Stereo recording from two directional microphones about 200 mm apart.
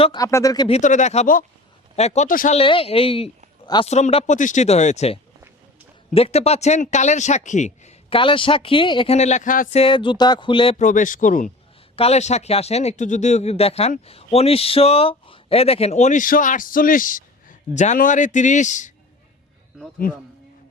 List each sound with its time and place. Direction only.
0.0 s a man's voice: 20° left (ahead or behind)
0.8 s speech: 40° left (ahead or behind)
2.6 s a man's voice: 30° left (ahead or behind)
10.8 s speech: 40° left (ahead or behind)
20.0 s a man's voice: 45° left (ahead or behind)